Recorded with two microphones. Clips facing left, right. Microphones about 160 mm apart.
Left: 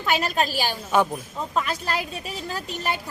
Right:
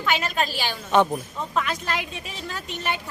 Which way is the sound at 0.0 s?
40° left (ahead or behind).